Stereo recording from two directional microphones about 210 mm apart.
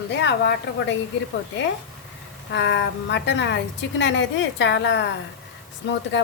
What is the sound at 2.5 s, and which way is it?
A woman's voice, 60° left (ahead or behind).